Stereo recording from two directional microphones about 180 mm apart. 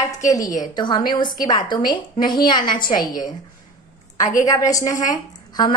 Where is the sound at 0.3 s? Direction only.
20° left (ahead or behind).